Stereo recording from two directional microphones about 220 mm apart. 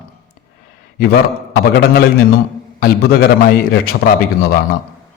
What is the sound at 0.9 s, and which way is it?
A man's voice, 45° left (ahead or behind).